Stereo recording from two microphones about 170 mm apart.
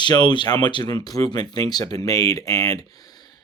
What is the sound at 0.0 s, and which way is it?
Speech, 25° left (ahead or behind).